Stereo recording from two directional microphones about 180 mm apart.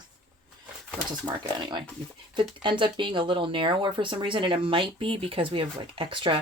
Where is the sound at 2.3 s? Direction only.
25° right (ahead or behind).